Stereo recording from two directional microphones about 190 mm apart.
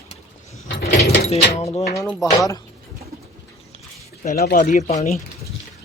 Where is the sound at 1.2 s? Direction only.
35° left (ahead or behind).